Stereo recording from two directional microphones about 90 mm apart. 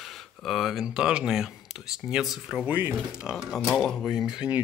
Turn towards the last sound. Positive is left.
turn(degrees=-10)  # may be behind; listen again after turning